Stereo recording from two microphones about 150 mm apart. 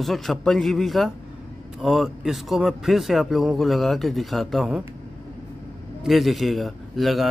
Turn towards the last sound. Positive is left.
turn(degrees=0)  # may be behind; listen again after turning